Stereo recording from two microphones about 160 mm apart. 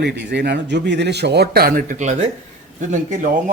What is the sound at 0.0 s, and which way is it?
Speech, 90° right.